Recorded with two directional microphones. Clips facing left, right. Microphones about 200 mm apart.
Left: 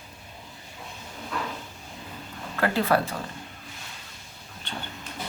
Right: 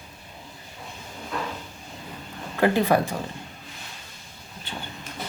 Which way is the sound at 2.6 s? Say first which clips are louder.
Right 3 dB; 15° right (ahead or behind).